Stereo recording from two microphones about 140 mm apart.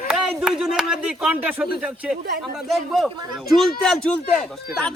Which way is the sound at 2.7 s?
Centre (ahead or behind).